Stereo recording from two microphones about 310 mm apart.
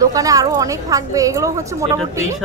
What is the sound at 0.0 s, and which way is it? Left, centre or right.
A woman's voice, centre.